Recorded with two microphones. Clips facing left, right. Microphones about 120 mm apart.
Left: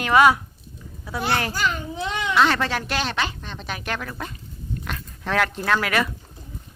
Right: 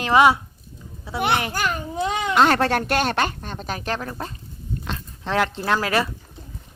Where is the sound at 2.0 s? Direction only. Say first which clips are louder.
Right 2 dB; 45° right (ahead or behind).